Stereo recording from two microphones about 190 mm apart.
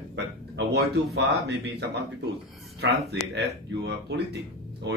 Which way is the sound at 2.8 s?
65° right (ahead or behind).